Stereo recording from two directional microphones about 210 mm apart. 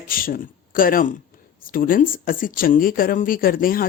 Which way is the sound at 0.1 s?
40° left (ahead or behind).